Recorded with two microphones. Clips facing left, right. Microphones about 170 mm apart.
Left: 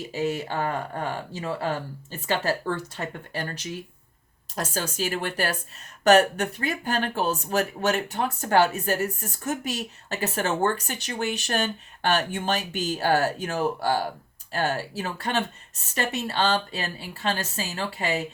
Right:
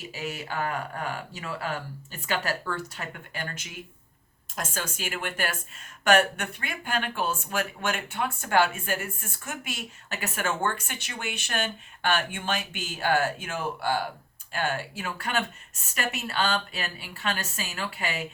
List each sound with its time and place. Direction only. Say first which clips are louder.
0.1 s speech: left 8 dB; 30° left (ahead or behind)